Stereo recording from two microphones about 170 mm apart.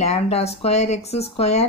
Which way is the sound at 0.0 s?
40° left (ahead or behind).